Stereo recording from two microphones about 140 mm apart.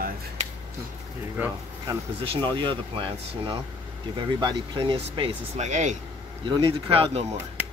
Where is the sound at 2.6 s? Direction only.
35° right (ahead or behind).